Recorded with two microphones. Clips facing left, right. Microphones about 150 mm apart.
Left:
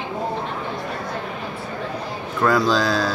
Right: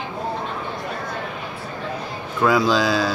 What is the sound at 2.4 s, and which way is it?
Speech, centre (ahead or behind).